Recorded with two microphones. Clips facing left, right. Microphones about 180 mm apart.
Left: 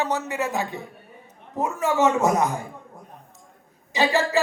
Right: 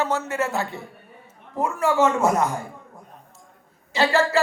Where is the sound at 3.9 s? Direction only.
15° left (ahead or behind).